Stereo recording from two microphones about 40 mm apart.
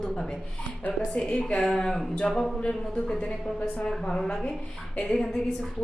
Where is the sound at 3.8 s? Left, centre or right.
Centre.